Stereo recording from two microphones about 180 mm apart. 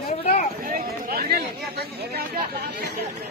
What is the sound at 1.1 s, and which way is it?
Chatter, 60° right (ahead or behind).